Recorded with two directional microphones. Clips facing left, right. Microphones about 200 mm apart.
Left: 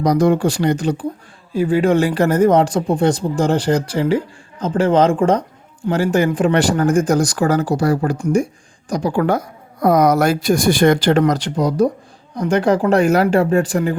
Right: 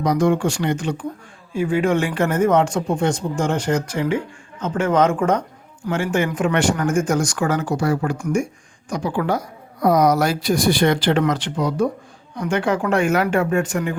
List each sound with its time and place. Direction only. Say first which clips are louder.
0.0 s speech: left 3 dB; 35° left (ahead or behind)
9.2 s speech: left 4 dB; 50° left (ahead or behind); by 13.9 s 35° left (ahead or behind)